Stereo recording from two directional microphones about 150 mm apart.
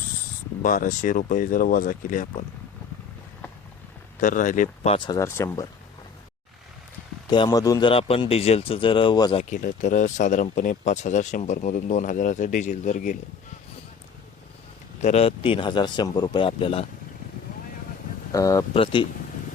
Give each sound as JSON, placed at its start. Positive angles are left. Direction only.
{"t": 0.6, "sound": "speech", "side_deg": 65}
{"t": 4.2, "sound": "speech", "side_deg": 60}
{"t": 4.9, "sound": "a man's voice", "side_deg": 30}
{"t": 5.2, "sound": "speech", "side_deg": 15}
{"t": 7.3, "sound": "a man's voice", "side_deg": 30}
{"t": 7.9, "sound": "speech", "side_deg": 40}
{"t": 9.4, "sound": "speech", "side_deg": 55}
{"t": 15.0, "sound": "speech", "side_deg": 40}
{"t": 18.3, "sound": "speech", "side_deg": 20}
{"t": 18.7, "sound": "speech", "side_deg": 35}